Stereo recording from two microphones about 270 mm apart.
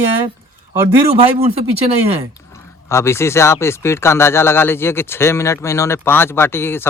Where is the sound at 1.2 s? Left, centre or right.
Right.